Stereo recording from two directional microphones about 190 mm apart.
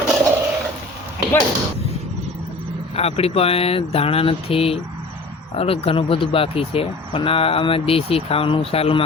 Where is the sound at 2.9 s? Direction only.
30° left (ahead or behind).